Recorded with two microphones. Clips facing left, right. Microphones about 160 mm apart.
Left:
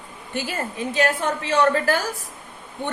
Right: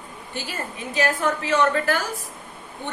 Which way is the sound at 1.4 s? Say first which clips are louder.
Left 4 dB; 30° left (ahead or behind).